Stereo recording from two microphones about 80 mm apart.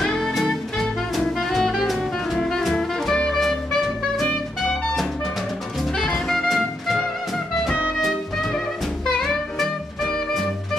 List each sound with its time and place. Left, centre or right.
0.0 s music: centre
1.1 s jazz: centre
5.9 s music: centre
9.6 s music: centre